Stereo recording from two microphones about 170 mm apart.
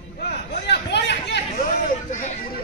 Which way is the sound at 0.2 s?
80° left.